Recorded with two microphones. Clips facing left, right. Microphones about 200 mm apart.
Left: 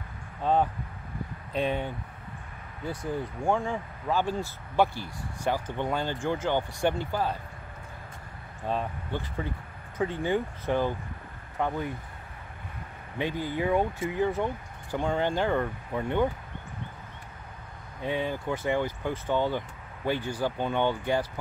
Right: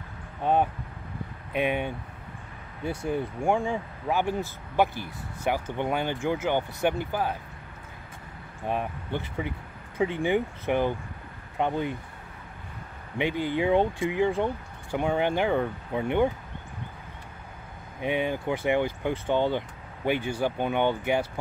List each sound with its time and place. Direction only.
0.4 s speech: 15° right (ahead or behind)
3.0 s speech: 15° right (ahead or behind)
8.6 s speech: 15° right (ahead or behind)
13.2 s speech: 20° right (ahead or behind)
14.3 s a sound: 20° right (ahead or behind)
15.0 s speech: 15° right (ahead or behind)
18.0 s speech: 20° right (ahead or behind)